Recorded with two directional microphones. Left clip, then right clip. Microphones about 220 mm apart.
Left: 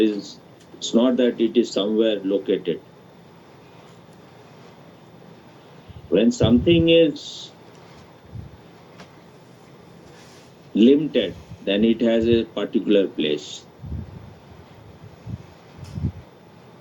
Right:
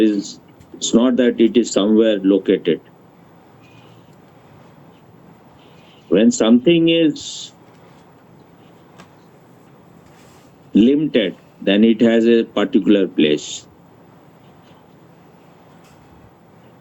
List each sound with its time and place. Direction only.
0.0 s speech: 45° right (ahead or behind)
6.1 s speech: 45° right (ahead or behind)
10.8 s speech: 45° right (ahead or behind)